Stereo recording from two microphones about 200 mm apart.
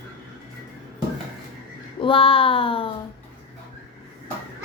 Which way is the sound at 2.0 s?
25° left (ahead or behind).